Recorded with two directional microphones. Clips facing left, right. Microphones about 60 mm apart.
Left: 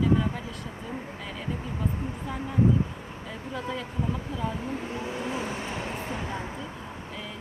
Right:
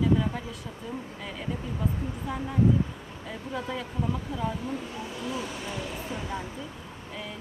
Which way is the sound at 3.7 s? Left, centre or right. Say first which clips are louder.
Even; centre.